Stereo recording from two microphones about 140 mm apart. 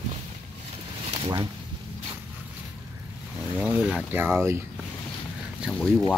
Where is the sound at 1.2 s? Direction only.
35° right (ahead or behind).